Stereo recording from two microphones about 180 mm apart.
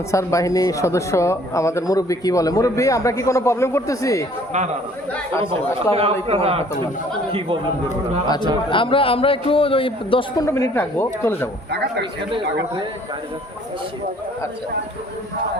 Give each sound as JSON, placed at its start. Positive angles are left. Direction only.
{"t": 0.1, "sound": "speech", "side_deg": 15}
{"t": 5.4, "sound": "speech", "side_deg": -30}
{"t": 8.7, "sound": "a man's voice", "side_deg": 30}
{"t": 10.4, "sound": "speech", "side_deg": 15}
{"t": 11.7, "sound": "a man's voice", "side_deg": -70}